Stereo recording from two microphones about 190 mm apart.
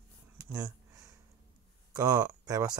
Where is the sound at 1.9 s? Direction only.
20° right (ahead or behind).